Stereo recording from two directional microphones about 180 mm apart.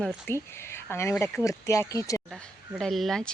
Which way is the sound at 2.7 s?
Centre (ahead or behind).